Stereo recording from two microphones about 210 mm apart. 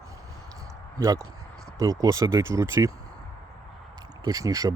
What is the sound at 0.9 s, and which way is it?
Speech, 20° right (ahead or behind).